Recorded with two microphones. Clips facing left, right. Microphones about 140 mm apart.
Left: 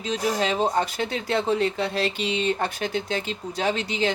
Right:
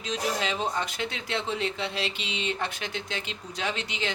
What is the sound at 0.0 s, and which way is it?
Speech, 35° left (ahead or behind).